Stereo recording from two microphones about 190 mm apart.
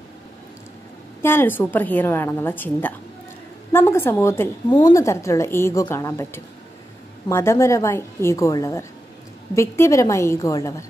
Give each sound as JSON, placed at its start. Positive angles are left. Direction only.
{"t": 1.2, "sound": "a woman's voice", "side_deg": 10}